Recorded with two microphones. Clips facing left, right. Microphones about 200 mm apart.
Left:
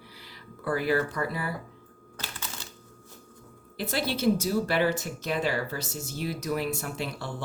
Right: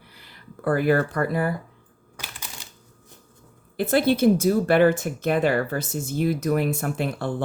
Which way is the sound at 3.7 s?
55° right (ahead or behind).